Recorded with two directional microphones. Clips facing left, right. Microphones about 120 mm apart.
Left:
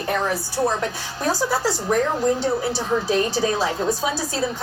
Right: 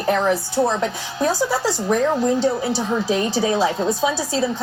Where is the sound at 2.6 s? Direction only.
15° right (ahead or behind).